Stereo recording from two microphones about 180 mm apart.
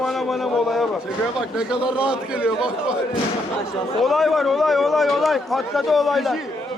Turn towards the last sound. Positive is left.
turn(degrees=0)  # may be behind; listen again after turning